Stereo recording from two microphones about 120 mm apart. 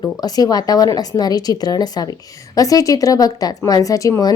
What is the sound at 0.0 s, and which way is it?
A woman's voice, 30° left (ahead or behind).